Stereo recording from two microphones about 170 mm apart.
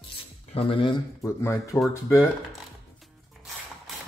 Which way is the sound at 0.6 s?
30° left (ahead or behind).